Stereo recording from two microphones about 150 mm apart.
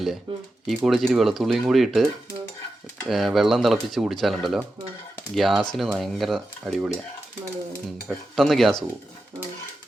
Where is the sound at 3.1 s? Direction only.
Centre (ahead or behind).